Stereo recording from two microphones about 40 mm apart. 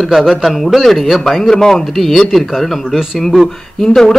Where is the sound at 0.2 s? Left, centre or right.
Centre.